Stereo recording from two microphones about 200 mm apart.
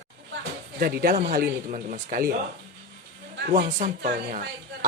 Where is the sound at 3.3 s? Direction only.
55° right (ahead or behind).